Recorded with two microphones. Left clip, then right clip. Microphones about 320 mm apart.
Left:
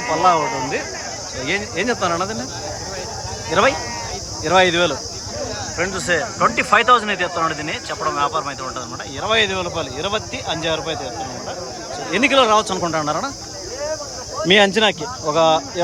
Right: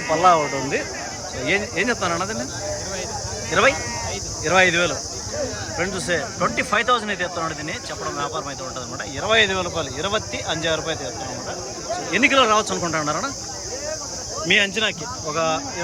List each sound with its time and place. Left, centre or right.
0.2 s speech: centre
3.5 s speech: centre
12.1 s speech: centre
14.4 s speech: centre